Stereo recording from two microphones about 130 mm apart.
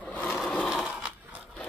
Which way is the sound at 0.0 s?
10° left (ahead or behind).